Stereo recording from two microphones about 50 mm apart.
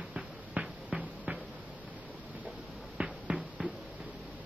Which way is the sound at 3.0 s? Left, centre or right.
Right.